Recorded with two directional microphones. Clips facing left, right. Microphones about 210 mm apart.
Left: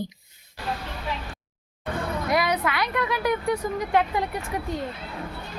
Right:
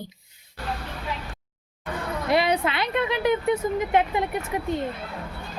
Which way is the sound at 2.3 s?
25° right (ahead or behind).